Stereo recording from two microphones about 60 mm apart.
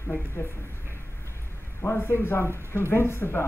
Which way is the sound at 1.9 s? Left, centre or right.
Left.